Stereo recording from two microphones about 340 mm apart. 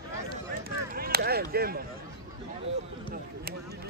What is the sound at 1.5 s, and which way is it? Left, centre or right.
Speech, right.